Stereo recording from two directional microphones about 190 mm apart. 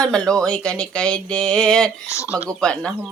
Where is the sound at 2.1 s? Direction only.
15° left (ahead or behind).